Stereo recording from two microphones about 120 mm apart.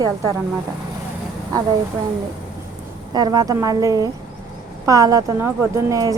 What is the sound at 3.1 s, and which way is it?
A woman's voice, 35° right (ahead or behind).